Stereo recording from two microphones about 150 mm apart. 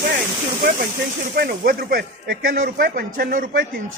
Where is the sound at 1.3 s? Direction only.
70° right (ahead or behind).